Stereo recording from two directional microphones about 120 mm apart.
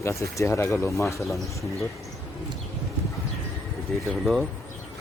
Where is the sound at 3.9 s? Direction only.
5° left (ahead or behind).